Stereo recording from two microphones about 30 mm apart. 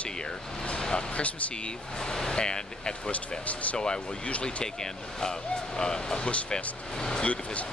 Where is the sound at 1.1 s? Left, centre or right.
Left.